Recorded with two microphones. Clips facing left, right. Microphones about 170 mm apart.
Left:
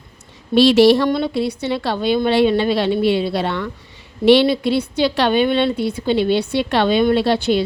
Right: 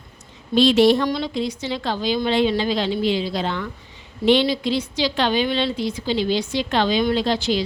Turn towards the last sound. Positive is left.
turn(degrees=60)  # may be behind; listen again after turning